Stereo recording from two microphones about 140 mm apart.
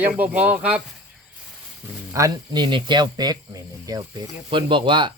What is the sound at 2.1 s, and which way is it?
Speech, 30° right (ahead or behind).